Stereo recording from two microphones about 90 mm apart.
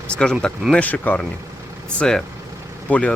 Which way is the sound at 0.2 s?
10° left (ahead or behind).